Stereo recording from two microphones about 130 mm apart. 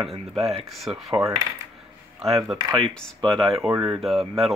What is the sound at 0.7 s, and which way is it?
Speech, centre (ahead or behind).